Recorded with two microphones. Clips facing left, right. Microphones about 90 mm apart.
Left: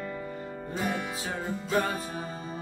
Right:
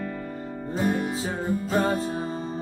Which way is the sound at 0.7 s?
40° right (ahead or behind).